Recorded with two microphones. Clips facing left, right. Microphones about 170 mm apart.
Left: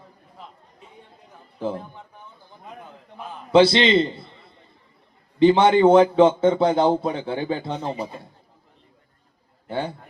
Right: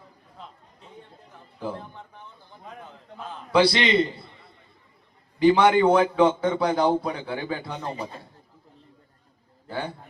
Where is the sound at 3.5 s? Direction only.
25° left (ahead or behind).